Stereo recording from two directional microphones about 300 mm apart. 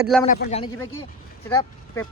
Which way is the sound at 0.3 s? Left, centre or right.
Left.